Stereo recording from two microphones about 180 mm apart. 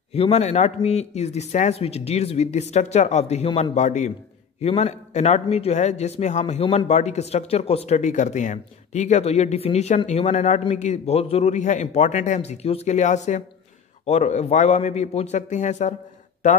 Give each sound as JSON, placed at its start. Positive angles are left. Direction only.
{"t": 0.1, "sound": "a man's voice", "side_deg": 35}